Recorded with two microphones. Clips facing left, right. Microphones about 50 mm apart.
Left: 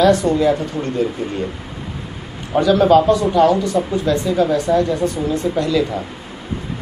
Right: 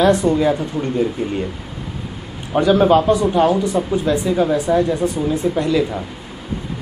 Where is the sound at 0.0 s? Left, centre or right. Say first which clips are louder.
Left 1 dB; right.